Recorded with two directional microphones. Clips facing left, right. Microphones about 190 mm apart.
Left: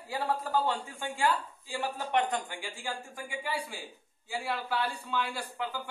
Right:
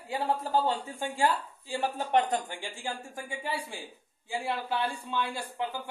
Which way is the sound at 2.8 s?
25° right (ahead or behind).